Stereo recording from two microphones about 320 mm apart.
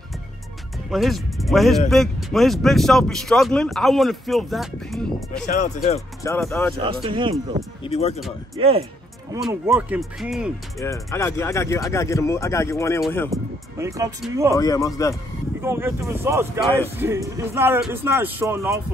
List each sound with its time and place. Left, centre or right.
0.8 s speech: centre
5.4 s speech: left
5.9 s speech: centre
6.8 s speech: centre
7.8 s speech: centre
8.5 s speech: centre
9.3 s speech: centre
10.8 s speech: centre
13.3 s speech: centre
14.5 s speech: centre
15.6 s speech: centre